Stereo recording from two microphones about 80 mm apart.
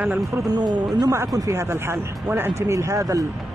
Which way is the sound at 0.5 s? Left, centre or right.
Right.